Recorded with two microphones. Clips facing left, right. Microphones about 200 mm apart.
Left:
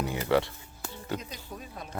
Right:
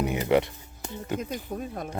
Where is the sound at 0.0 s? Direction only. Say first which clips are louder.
Right 3 dB; 20° right (ahead or behind).